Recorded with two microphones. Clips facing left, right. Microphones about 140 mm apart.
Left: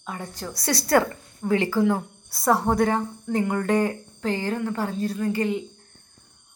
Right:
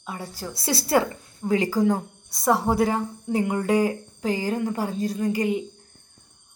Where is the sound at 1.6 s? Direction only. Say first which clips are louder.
Even; 40° right (ahead or behind).